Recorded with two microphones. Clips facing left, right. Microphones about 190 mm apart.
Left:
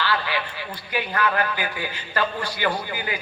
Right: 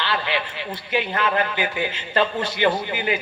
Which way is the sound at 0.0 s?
20° right (ahead or behind).